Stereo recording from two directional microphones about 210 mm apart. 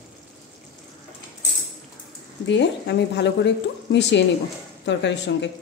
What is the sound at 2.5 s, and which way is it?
A woman's voice, 55° left (ahead or behind).